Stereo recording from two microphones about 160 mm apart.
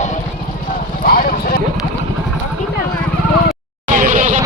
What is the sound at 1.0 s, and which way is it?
Clip-clop, 65° left (ahead or behind).